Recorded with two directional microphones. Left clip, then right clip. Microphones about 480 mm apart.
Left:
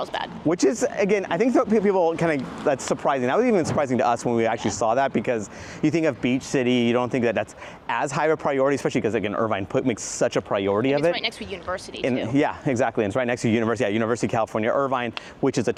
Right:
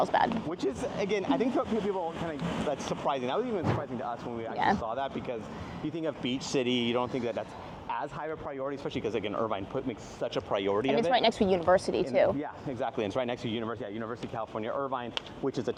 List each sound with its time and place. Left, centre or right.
0.0 s speech: centre
0.5 s speech: left
2.6 s speech: left
6.5 s speech: left
9.0 s speech: left
10.5 s speech: left
11.1 s speech: right
12.4 s speech: left
12.8 s speech: left